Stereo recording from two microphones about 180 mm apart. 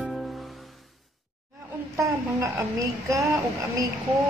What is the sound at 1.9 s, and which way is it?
A woman's voice, 15° right (ahead or behind).